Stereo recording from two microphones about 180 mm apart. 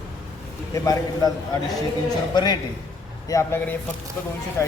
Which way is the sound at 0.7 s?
20° left (ahead or behind).